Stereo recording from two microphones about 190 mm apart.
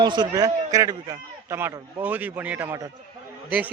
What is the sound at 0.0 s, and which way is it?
A man's voice, 20° right (ahead or behind).